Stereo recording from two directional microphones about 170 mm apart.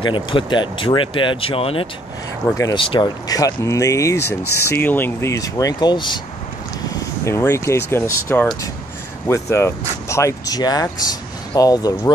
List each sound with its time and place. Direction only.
0.0 s speech: 30° left (ahead or behind)
2.5 s speech: 20° left (ahead or behind)
2.8 s speech: 30° left (ahead or behind)
6.9 s speech: 15° left (ahead or behind)